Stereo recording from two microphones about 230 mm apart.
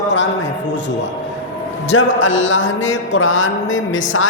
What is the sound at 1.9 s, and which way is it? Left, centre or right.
A man's voice, left.